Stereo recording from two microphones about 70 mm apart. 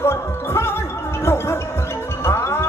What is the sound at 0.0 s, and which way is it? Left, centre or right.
Music, left.